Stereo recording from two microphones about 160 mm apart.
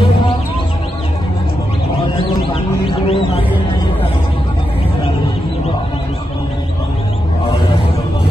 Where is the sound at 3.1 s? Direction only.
35° left (ahead or behind).